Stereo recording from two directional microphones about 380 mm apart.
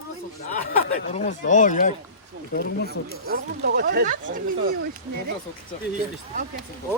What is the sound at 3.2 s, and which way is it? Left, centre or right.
Speech, right.